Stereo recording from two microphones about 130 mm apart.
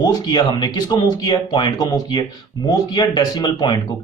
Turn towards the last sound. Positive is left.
turn(degrees=35)  # may be behind; listen again after turning